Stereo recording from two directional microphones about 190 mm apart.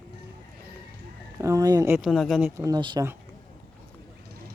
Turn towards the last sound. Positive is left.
turn(degrees=-20)  # may be behind; listen again after turning